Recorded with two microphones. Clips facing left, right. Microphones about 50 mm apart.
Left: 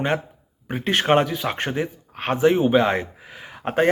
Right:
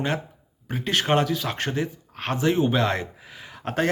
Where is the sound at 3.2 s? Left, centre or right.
Centre.